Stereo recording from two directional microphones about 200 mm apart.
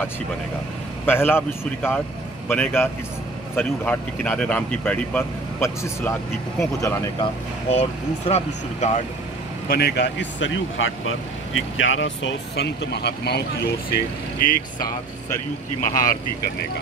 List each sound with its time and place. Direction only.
1.0 s a man's voice: 10° left (ahead or behind)
7.7 s speech: 30° left (ahead or behind)
9.7 s speech: 55° left (ahead or behind)
15.8 s speech: 45° left (ahead or behind)